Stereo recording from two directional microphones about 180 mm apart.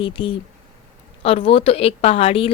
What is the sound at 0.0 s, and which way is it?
Speech, 30° left (ahead or behind).